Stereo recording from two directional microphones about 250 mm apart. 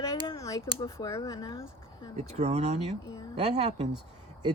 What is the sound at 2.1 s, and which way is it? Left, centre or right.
Speech, right.